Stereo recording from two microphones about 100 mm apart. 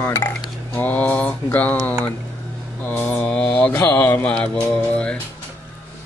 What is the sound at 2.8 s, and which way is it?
Speech, 15° left (ahead or behind).